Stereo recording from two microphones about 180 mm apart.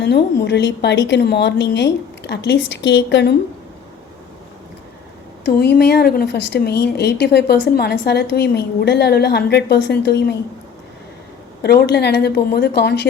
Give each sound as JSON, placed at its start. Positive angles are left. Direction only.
{"t": 0.0, "sound": "a woman's voice", "side_deg": 65}
{"t": 5.5, "sound": "speech", "side_deg": 60}
{"t": 11.6, "sound": "speech", "side_deg": 65}